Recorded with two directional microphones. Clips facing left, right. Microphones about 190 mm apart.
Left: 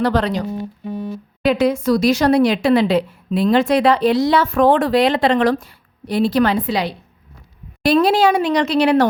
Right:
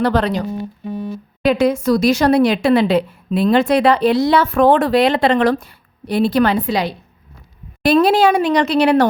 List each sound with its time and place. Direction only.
0.0 s speech: 55° right (ahead or behind)
1.5 s speech: 45° right (ahead or behind)